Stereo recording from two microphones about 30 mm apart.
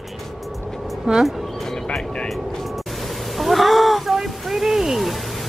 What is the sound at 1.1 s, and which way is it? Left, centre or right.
Speech, right.